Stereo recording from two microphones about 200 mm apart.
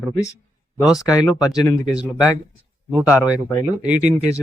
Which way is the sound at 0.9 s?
Centre (ahead or behind).